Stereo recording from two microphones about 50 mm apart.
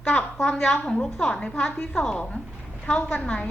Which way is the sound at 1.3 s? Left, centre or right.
Left.